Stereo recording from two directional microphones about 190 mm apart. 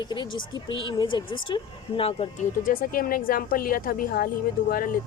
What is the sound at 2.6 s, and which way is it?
A woman's voice, 50° left (ahead or behind).